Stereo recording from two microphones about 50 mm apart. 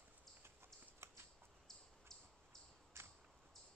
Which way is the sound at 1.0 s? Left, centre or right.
Right.